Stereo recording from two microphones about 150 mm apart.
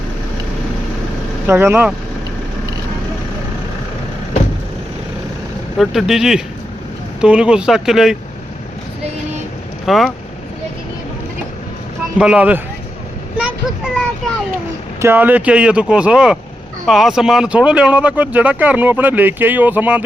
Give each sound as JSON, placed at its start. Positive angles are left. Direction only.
{"t": 1.5, "sound": "speech", "side_deg": -15}
{"t": 5.7, "sound": "speech", "side_deg": 0}
{"t": 9.8, "sound": "speech", "side_deg": 0}
{"t": 12.1, "sound": "speech", "side_deg": -5}
{"t": 13.3, "sound": "vehicle", "side_deg": -10}
{"t": 15.0, "sound": "speech", "side_deg": -15}